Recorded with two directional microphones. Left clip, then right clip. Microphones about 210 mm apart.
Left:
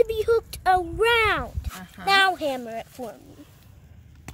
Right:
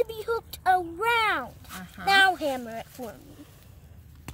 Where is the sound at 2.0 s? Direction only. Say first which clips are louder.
Left 1 dB; 15° left (ahead or behind).